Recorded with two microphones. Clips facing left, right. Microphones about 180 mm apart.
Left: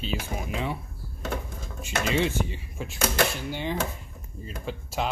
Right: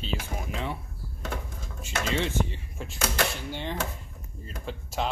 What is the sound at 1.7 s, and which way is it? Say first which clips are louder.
Speech: left 3 dB; 15° left (ahead or behind).